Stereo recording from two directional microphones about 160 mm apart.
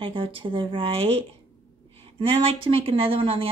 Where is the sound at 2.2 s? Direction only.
35° right (ahead or behind).